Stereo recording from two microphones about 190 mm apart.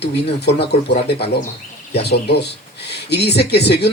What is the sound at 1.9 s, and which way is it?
Speech, 60° left (ahead or behind).